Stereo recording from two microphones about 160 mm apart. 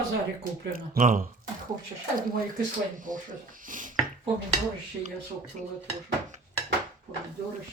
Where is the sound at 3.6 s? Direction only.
55° right (ahead or behind).